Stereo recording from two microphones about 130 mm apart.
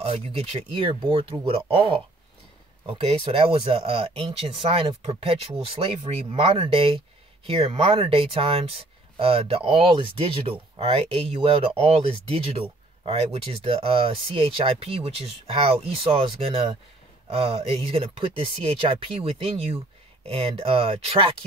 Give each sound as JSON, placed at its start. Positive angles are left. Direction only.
{"t": 0.0, "sound": "speech", "side_deg": -45}